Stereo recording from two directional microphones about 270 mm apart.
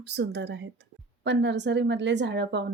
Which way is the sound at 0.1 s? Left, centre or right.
Right.